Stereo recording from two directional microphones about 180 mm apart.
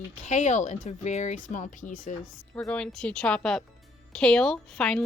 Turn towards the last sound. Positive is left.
turn(degrees=5)  # may be behind; listen again after turning